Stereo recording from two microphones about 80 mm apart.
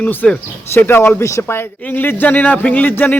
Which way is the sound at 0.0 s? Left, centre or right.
Left.